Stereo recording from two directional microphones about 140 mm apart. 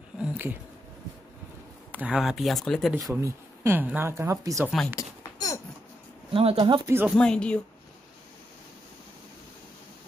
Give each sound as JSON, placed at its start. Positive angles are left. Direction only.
{"t": 0.2, "sound": "a sound", "side_deg": -10}
{"t": 1.9, "sound": "speech", "side_deg": -10}
{"t": 3.0, "sound": "speech", "side_deg": -25}
{"t": 4.6, "sound": "speech", "side_deg": 0}
{"t": 6.3, "sound": "speech", "side_deg": -40}
{"t": 7.1, "sound": "speech", "side_deg": 5}